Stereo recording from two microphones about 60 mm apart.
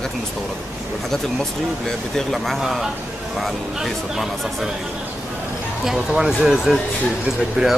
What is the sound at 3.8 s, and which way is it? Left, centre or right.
Speech, centre.